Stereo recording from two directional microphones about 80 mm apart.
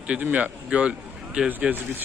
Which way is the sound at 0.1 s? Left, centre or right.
Centre.